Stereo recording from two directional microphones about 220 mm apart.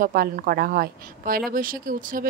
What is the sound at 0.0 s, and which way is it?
A woman's voice, 40° right (ahead or behind).